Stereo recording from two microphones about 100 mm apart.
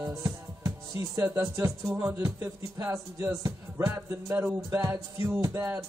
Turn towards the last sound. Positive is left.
turn(degrees=-30)  # may be behind; listen again after turning